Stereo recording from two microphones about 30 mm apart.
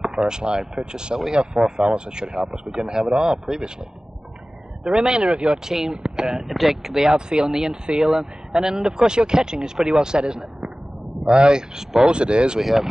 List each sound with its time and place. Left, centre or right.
0.0 s speech: right
4.9 s speech: centre
6.5 s speech: centre; by 12.5 s right
12.5 s speech: centre